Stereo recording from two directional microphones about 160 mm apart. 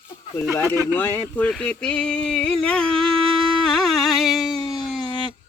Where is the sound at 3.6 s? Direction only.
Centre (ahead or behind).